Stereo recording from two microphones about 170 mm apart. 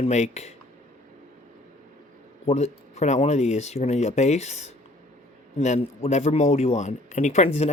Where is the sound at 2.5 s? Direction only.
40° left (ahead or behind).